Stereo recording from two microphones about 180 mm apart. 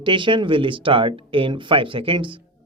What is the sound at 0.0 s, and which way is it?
Speech, 25° right (ahead or behind).